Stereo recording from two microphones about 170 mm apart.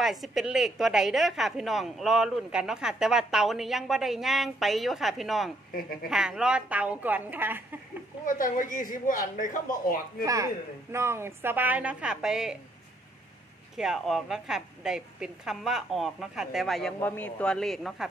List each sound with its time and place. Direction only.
0.0 s a woman's voice: centre (ahead or behind)
8.3 s speech: 50° left (ahead or behind)
10.2 s a woman's voice: 20° right (ahead or behind); by 12.5 s 5° right (ahead or behind)
13.7 s a woman's voice: centre (ahead or behind)